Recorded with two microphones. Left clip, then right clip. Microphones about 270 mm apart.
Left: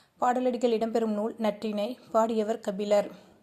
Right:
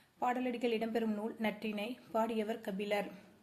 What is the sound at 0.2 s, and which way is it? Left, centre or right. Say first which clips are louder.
Speech: left 10 dB; left.